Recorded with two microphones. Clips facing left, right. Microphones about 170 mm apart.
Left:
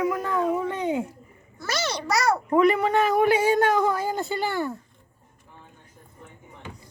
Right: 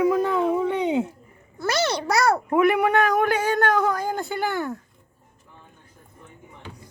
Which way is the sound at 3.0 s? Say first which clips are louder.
Left 1 dB; 5° left (ahead or behind).